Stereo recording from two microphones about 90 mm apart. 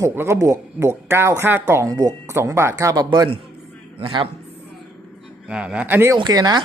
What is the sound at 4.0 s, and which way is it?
Speech, 60° right (ahead or behind).